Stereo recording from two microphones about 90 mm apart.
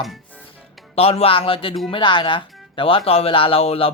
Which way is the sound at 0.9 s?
90° left.